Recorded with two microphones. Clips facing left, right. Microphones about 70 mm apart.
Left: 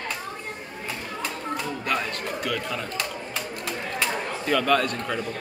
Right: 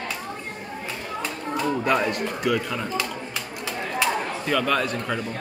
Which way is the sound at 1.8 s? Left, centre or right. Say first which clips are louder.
Right 6 dB; centre.